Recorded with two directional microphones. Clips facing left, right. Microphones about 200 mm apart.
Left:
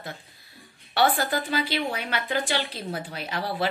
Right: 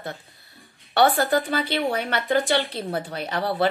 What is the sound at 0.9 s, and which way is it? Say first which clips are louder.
Speech: right 4 dB; 60° right (ahead or behind).